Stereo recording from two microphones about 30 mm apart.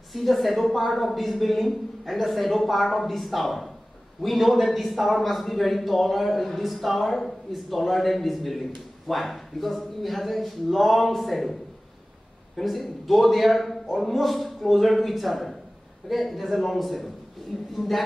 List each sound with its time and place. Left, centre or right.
0.1 s a man's voice: centre
12.5 s a man's voice: centre